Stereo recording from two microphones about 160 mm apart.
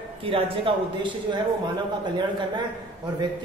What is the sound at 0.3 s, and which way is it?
Speech, 30° right (ahead or behind).